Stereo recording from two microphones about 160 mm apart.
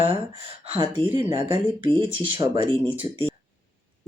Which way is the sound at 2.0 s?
30° right (ahead or behind).